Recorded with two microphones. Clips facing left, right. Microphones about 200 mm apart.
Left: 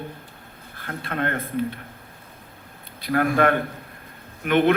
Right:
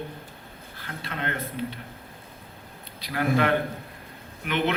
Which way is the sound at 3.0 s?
50° left (ahead or behind).